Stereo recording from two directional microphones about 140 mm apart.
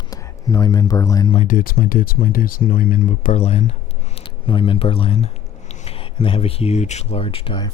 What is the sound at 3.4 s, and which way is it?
Speech, 50° left (ahead or behind).